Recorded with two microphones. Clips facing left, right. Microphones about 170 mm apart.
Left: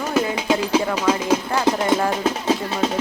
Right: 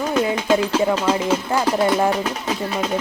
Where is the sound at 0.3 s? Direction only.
10° left (ahead or behind).